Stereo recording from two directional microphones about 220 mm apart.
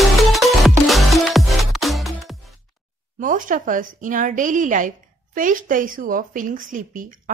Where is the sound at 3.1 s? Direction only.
35° right (ahead or behind).